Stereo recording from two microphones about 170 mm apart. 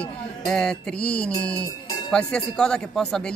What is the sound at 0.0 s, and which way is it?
Speech, 5° left (ahead or behind).